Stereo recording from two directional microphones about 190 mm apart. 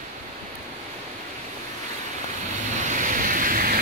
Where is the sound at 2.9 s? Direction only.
45° right (ahead or behind).